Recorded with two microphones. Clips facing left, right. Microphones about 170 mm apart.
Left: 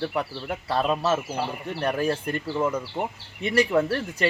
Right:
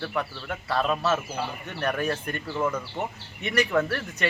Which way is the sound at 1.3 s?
30° left (ahead or behind).